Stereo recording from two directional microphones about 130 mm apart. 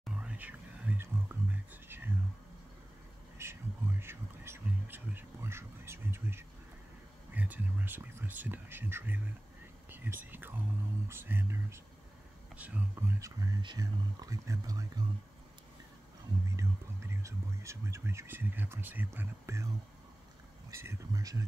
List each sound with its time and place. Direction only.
0.0 s whispering: 10° right (ahead or behind)
3.3 s a sound: 20° right (ahead or behind)
7.3 s speech: 15° right (ahead or behind)
13.2 s speech: 25° right (ahead or behind)
17.2 s speech: 20° right (ahead or behind)
20.7 s speech: 20° right (ahead or behind)